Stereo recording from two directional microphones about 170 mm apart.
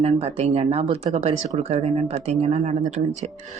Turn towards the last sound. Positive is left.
turn(degrees=-40)  # may be behind; listen again after turning